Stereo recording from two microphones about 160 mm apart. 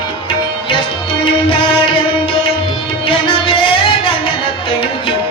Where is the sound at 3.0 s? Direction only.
35° left (ahead or behind).